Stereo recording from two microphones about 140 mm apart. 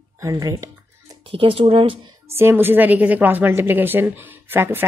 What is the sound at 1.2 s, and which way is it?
Speech, 40° right (ahead or behind).